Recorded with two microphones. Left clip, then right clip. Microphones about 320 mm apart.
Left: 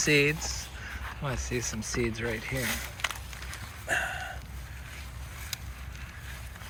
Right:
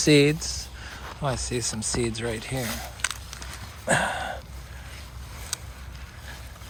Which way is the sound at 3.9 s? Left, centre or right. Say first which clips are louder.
Right 6 dB; centre.